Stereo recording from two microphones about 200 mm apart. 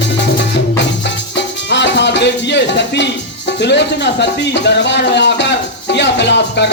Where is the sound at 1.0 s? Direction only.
60° left (ahead or behind).